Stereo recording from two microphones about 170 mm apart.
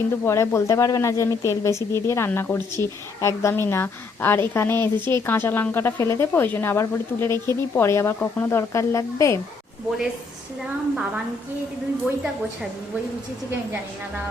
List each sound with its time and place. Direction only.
0.3 s speech: 15° left (ahead or behind)